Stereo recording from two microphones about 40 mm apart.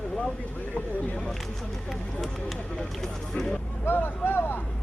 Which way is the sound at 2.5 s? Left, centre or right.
Left.